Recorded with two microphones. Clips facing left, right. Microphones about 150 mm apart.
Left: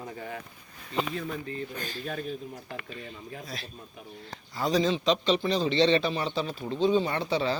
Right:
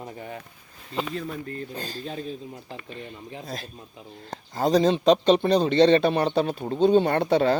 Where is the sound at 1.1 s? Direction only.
40° right (ahead or behind).